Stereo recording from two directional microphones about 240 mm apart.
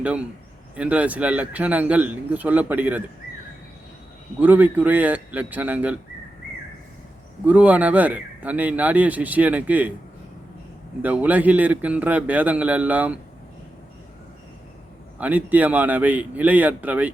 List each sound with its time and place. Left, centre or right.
0.8 s speech: centre
4.4 s speech: centre
7.4 s speech: centre
11.0 s speech: centre
15.2 s speech: centre